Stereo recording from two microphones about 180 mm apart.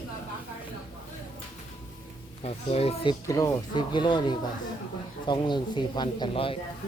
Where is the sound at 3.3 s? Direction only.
15° left (ahead or behind).